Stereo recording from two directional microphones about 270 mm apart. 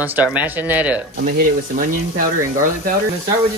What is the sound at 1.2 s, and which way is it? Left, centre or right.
Speech, right.